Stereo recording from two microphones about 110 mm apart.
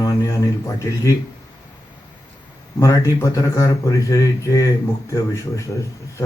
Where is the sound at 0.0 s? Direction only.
30° left (ahead or behind).